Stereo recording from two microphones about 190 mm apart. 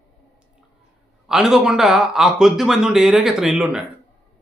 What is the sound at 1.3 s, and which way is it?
Speech, 5° right (ahead or behind).